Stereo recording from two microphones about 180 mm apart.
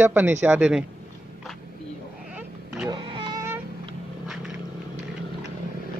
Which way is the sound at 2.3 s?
5° right (ahead or behind).